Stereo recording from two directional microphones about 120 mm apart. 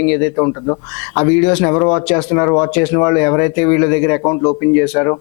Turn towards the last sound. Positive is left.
turn(degrees=25)  # may be behind; listen again after turning